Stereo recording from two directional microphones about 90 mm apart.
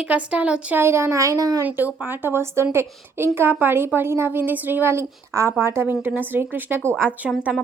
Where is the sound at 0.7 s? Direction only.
30° right (ahead or behind).